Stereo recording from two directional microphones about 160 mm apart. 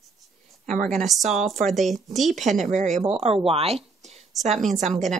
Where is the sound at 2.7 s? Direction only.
45° right (ahead or behind).